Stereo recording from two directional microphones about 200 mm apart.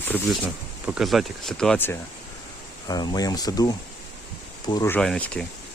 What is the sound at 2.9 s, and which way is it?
Speech, 20° left (ahead or behind).